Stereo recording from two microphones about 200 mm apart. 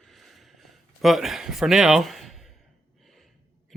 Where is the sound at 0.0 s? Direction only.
Centre (ahead or behind).